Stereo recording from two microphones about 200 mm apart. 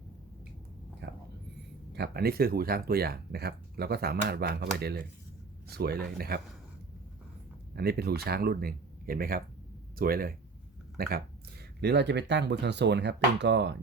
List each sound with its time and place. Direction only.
1.0 s whispering: 60° right (ahead or behind)
1.9 s speech: 55° right (ahead or behind)
7.8 s speech: 50° right (ahead or behind)